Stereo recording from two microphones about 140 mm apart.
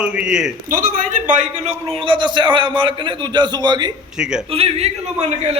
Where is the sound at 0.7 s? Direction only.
85° right; by 3.9 s 30° right (ahead or behind).